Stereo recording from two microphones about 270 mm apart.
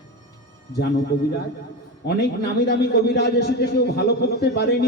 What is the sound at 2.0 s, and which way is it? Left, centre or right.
A man's voice, left.